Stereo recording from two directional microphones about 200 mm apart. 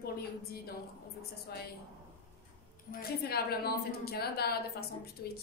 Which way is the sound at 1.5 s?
50° left (ahead or behind).